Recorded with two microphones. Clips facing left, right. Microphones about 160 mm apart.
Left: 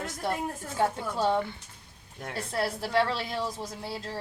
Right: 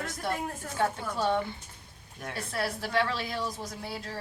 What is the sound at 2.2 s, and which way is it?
A woman's voice, 25° left (ahead or behind).